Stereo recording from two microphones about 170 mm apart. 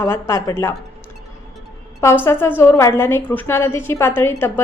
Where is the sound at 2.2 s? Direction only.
15° left (ahead or behind).